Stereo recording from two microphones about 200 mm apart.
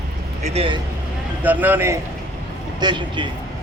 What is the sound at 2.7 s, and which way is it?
Speech, 20° right (ahead or behind).